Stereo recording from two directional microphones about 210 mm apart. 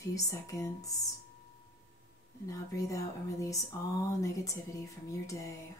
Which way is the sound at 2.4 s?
15° left (ahead or behind).